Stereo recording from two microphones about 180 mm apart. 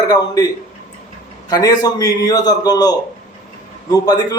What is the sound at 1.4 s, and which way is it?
A man's voice, 20° left (ahead or behind).